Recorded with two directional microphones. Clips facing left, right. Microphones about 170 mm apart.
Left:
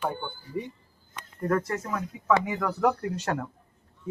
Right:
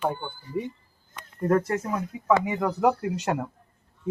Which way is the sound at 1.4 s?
30° right (ahead or behind).